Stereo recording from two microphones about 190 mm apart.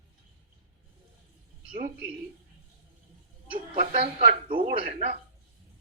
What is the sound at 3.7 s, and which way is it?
A man's voice, 35° right (ahead or behind).